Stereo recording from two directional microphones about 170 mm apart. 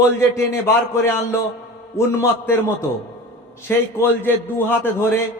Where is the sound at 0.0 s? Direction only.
15° left (ahead or behind).